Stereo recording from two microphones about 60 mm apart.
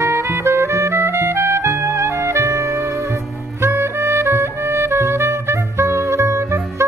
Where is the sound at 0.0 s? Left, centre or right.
Right.